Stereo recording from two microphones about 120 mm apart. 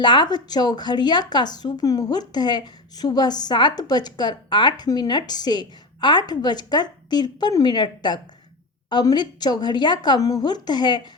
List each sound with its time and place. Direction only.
0.0 s speech: 40° left (ahead or behind)